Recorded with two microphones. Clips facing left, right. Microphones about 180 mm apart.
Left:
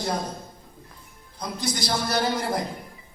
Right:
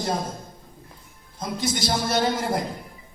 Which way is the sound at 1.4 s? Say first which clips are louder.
Right 3 dB; 25° right (ahead or behind).